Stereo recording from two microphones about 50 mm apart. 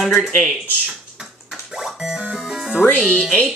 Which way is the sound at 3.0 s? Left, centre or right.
Centre.